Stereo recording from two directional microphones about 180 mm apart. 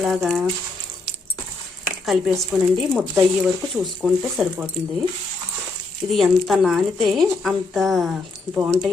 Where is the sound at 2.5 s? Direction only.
5° right (ahead or behind).